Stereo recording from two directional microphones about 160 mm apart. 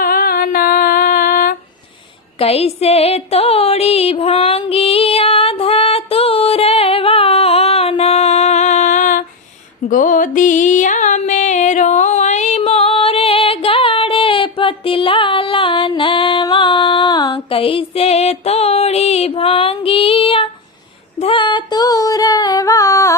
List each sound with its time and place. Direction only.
0.0 s female singing: 70° left (ahead or behind)
2.4 s a sound: 40° left (ahead or behind)
9.9 s music: 55° left (ahead or behind); by 20.5 s 35° left (ahead or behind)
21.2 s female singing: 30° left (ahead or behind)